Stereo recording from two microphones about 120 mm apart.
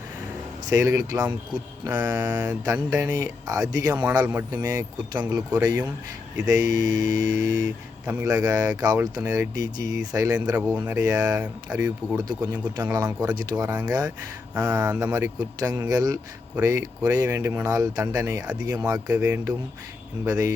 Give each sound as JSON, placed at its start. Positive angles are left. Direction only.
{"t": 0.7, "sound": "speech", "side_deg": -25}
{"t": 1.8, "sound": "mantra", "side_deg": -30}
{"t": 2.9, "sound": "speech", "side_deg": -30}
{"t": 6.4, "sound": "mantra", "side_deg": -30}
{"t": 8.0, "sound": "speech", "side_deg": -25}
{"t": 9.1, "sound": "mantra", "side_deg": -30}
{"t": 10.9, "sound": "speech", "side_deg": -30}
{"t": 13.1, "sound": "mantra", "side_deg": -30}
{"t": 14.6, "sound": "speech", "side_deg": -30}